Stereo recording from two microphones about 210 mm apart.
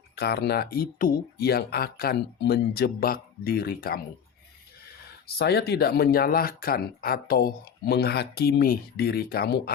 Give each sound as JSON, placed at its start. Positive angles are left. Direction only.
{"t": 0.2, "sound": "speech", "side_deg": 50}
{"t": 5.2, "sound": "speech", "side_deg": 50}